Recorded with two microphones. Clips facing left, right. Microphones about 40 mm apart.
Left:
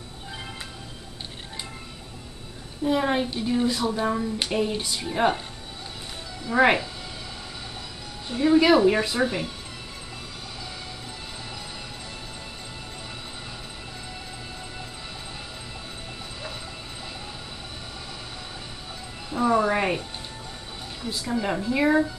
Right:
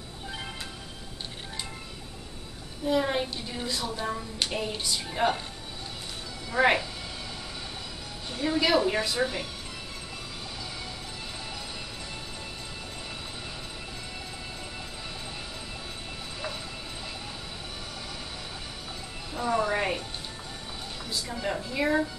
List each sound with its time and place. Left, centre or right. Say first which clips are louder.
2.8 s a woman's voice: left 3 dB; centre
4.0 s speech: left 6 dB; left
4.6 s a woman's voice: left 5 dB; centre
6.5 s a woman's voice: left 4 dB; centre
8.3 s a woman's voice: left 7 dB; centre
19.3 s music: left 5 dB; centre
21.1 s a woman's voice: left 5 dB; centre